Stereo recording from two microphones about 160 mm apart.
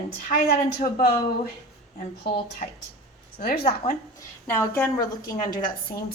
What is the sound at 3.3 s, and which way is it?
Speech, 70° left (ahead or behind).